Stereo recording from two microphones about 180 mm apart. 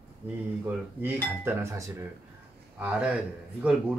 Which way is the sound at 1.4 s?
15° right (ahead or behind).